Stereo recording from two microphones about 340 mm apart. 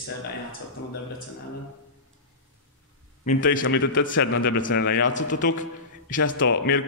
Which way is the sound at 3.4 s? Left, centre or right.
Left.